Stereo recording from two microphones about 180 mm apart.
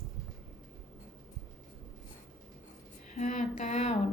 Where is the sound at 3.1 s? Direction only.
40° left (ahead or behind).